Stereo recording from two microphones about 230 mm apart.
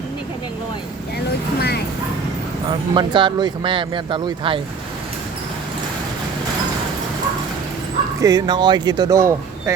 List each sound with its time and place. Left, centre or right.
2.6 s speech: right
8.2 s speech: centre